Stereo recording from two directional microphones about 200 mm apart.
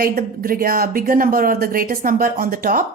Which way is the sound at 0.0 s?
50° right (ahead or behind).